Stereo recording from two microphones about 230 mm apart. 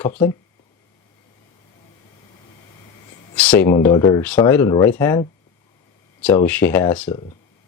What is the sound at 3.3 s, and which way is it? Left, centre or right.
Speech, centre.